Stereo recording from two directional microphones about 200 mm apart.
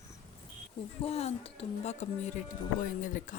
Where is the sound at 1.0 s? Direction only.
30° left (ahead or behind).